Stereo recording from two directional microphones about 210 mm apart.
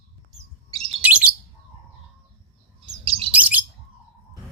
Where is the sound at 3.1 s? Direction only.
25° right (ahead or behind).